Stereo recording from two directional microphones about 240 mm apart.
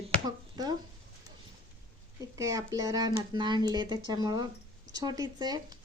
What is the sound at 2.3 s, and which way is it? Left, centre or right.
A woman's voice, centre.